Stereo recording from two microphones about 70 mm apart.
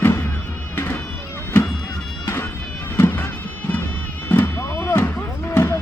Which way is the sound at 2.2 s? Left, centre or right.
Left.